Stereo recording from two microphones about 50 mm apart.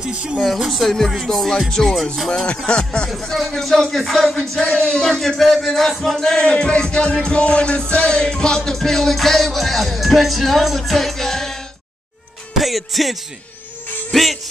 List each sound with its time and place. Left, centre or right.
0.0 s speech: right
0.7 s music: centre
2.4 s music: left
3.1 s music: centre